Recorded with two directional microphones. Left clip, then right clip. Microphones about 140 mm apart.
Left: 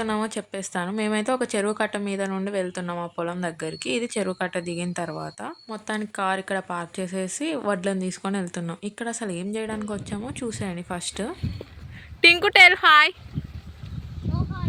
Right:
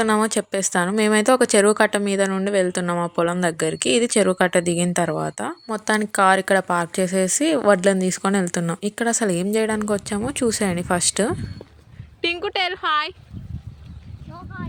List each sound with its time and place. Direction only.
0.0 s a woman's voice: 35° right (ahead or behind)
12.2 s a woman's voice: centre (ahead or behind)